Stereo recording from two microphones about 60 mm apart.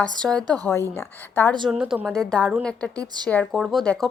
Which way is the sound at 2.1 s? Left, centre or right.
Centre.